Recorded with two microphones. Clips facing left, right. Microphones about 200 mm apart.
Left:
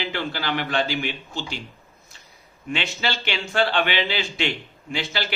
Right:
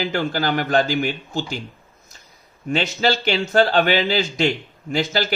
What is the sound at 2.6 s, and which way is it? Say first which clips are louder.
Speech: right 7 dB; 40° right (ahead or behind).